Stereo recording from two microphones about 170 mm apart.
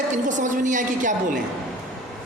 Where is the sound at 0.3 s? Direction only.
45° right (ahead or behind).